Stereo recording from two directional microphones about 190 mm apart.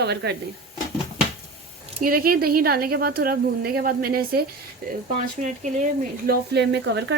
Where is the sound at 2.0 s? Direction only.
50° right (ahead or behind).